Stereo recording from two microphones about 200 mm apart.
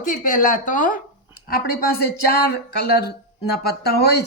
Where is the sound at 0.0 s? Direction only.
40° left (ahead or behind).